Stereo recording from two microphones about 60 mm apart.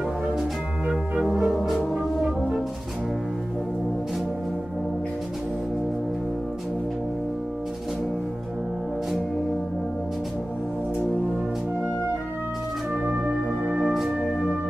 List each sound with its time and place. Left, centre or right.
0.8 s music: centre
13.0 s music: centre